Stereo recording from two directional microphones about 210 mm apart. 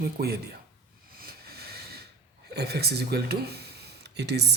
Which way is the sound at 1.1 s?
45° right (ahead or behind).